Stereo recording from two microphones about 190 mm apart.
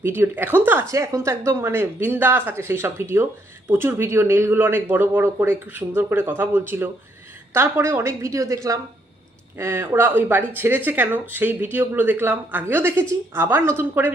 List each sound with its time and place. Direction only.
0.0 s speech: 10° right (ahead or behind)